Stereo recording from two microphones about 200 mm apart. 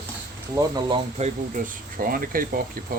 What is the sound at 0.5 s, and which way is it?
Speech, 20° right (ahead or behind).